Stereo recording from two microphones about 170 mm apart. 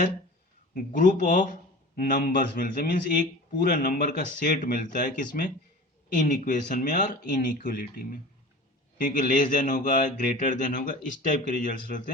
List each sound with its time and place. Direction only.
0.7 s a man's voice: 50° left (ahead or behind)